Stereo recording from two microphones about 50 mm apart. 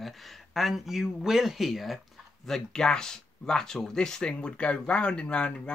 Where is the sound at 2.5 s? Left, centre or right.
Centre.